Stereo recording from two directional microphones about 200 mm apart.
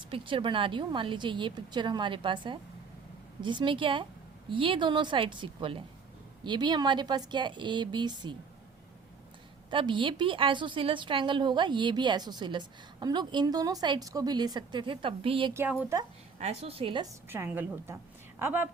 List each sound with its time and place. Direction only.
0.1 s a woman's voice: 25° right (ahead or behind)
9.6 s a woman's voice: 25° right (ahead or behind)
15.5 s speech: 10° right (ahead or behind)
16.4 s a woman's voice: 30° right (ahead or behind)
17.2 s a woman's voice: 10° right (ahead or behind)